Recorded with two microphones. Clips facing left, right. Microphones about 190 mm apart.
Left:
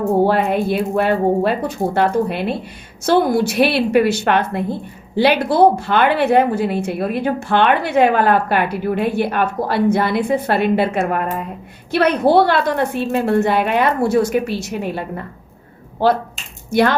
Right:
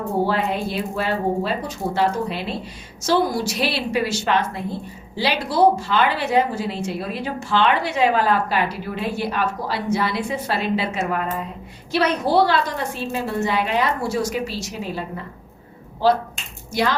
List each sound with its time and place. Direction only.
0.3 s a woman's voice: 55° left (ahead or behind)